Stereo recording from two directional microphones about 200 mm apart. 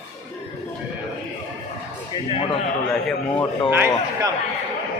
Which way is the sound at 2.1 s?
25° left (ahead or behind).